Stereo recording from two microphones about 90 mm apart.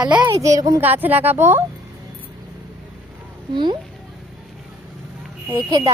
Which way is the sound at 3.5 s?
60° right (ahead or behind).